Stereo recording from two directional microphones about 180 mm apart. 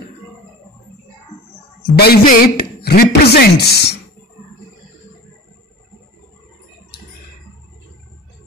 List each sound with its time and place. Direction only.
2.0 s a man's voice: 55° left (ahead or behind)